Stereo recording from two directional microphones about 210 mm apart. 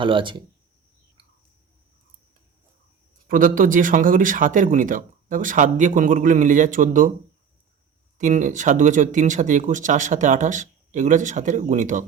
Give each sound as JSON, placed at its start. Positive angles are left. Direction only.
{"t": 0.0, "sound": "speech", "side_deg": -25}
{"t": 3.2, "sound": "speech", "side_deg": -40}
{"t": 8.2, "sound": "speech", "side_deg": -35}